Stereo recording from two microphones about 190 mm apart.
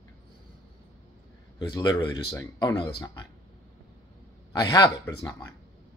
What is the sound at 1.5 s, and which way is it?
Speech, 20° left (ahead or behind).